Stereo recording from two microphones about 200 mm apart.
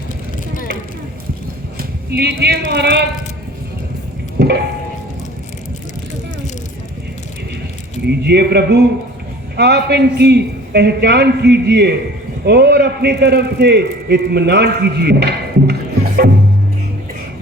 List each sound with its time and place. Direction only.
0.5 s vehicle: 40° left (ahead or behind)
2.0 s a man's voice: 55° right (ahead or behind)
4.4 s a sound: 55° right (ahead or behind)
8.0 s a man's voice: 55° right (ahead or behind)